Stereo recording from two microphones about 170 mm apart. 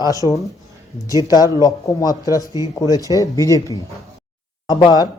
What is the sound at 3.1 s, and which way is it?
Speech, 20° left (ahead or behind).